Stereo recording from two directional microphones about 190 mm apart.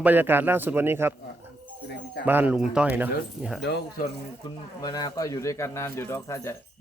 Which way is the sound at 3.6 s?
60° left (ahead or behind).